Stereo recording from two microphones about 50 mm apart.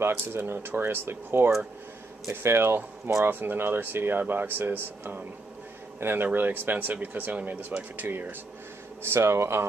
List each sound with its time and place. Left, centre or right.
0.0 s speech: right
3.3 s speech: right
6.2 s speech: right
9.0 s speech: right